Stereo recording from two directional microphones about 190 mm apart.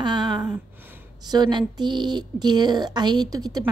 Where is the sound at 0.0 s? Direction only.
25° right (ahead or behind).